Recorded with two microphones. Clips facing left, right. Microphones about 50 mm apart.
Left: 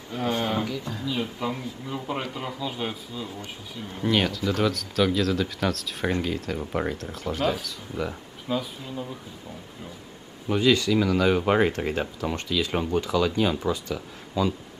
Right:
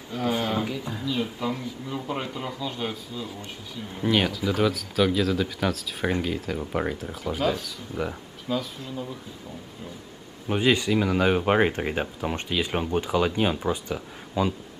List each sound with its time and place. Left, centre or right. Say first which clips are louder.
0.3 s speech: even; centre
0.7 s speech: even; centre
1.0 s speech: right 1 dB; centre
8.5 s speech: even; centre
10.5 s speech: left 1 dB; right